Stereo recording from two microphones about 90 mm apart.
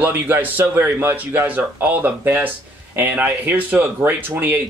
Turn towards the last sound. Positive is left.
turn(degrees=-25)  # may be behind; listen again after turning